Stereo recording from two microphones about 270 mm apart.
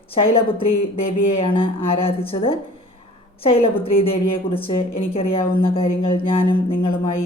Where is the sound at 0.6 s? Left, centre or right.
Left.